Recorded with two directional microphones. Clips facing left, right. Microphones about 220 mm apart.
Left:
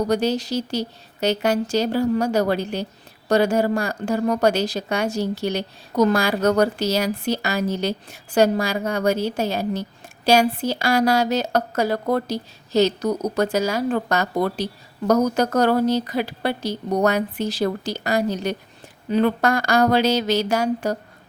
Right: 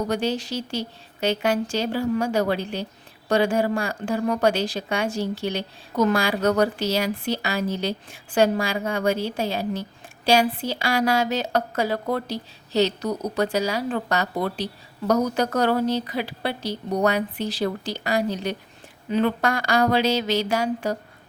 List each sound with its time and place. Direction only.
0.1 s a woman's voice: 40° left (ahead or behind)